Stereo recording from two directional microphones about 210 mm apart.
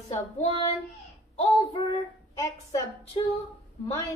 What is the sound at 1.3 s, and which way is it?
A woman's voice, 25° left (ahead or behind).